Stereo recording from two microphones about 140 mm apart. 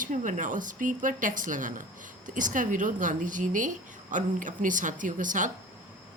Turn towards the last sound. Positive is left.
turn(degrees=-65)  # may be behind; listen again after turning